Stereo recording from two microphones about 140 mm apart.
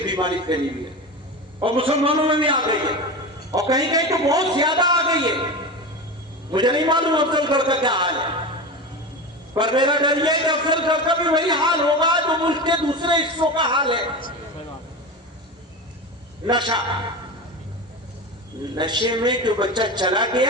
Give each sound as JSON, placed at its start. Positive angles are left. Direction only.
{"t": 0.0, "sound": "a sound", "side_deg": -30}
{"t": 1.6, "sound": "a man's voice", "side_deg": -40}
{"t": 6.5, "sound": "a man's voice", "side_deg": -30}
{"t": 9.6, "sound": "a man's voice", "side_deg": -30}
{"t": 16.5, "sound": "a man's voice", "side_deg": -35}
{"t": 18.8, "sound": "a man's voice", "side_deg": -30}